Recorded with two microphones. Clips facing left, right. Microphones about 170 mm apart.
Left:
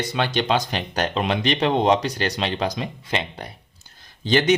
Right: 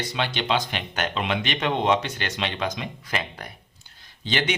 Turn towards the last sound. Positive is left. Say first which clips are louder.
# left 7 dB
turn(degrees=40)  # may be behind; listen again after turning